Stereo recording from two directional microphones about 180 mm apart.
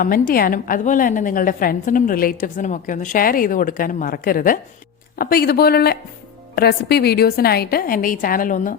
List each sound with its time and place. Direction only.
0.0 s a woman's voice: 50° left (ahead or behind)